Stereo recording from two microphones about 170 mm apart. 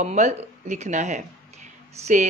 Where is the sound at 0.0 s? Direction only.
40° right (ahead or behind).